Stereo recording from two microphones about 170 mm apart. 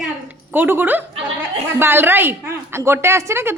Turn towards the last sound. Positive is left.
turn(degrees=-15)  # may be behind; listen again after turning